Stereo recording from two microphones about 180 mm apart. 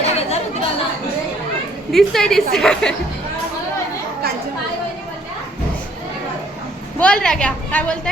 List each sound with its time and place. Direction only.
0.0 s chatter: 35° left (ahead or behind)
1.9 s a woman's voice: centre (ahead or behind)
7.0 s a woman's voice: 5° left (ahead or behind)